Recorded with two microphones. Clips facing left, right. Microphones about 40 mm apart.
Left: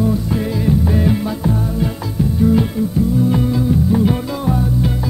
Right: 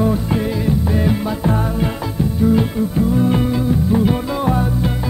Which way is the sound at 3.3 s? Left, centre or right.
Right.